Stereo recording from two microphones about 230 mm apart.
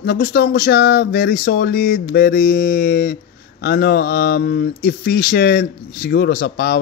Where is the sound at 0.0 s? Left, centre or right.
Left.